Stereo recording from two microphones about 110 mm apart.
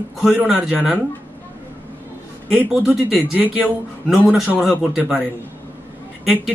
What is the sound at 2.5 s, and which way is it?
A man's voice, 10° right (ahead or behind).